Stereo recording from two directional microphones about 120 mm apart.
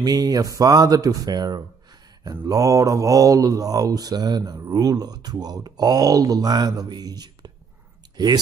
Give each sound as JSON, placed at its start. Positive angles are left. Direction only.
{"t": 0.0, "sound": "mantra", "side_deg": -30}